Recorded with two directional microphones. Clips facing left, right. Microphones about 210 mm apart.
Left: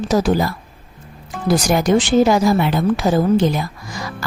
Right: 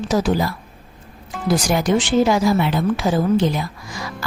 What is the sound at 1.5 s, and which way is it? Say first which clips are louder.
A woman's voice: left 3 dB; 45° left (ahead or behind).